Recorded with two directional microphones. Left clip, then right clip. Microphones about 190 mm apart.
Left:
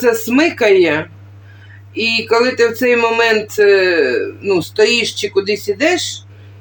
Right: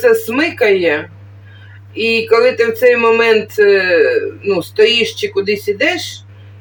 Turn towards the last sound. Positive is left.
turn(degrees=40)  # may be behind; listen again after turning